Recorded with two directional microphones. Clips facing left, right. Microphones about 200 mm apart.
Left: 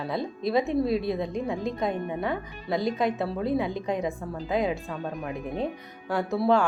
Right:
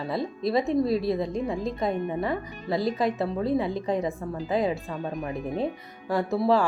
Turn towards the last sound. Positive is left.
turn(degrees=0)  # may be behind; listen again after turning